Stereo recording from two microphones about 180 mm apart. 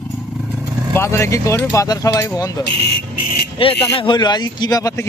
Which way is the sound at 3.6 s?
30° left (ahead or behind).